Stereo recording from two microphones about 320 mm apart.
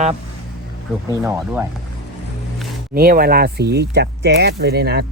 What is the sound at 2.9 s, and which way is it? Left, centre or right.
Speech, right.